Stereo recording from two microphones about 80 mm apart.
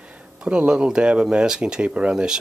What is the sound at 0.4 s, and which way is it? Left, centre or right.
Speech, centre.